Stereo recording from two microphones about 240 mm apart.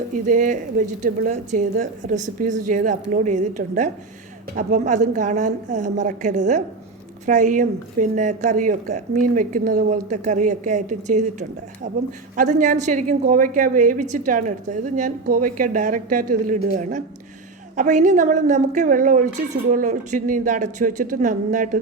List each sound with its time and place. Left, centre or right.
0.1 s a woman's voice: right